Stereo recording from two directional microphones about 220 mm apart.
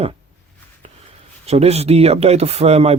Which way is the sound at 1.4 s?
30° right (ahead or behind).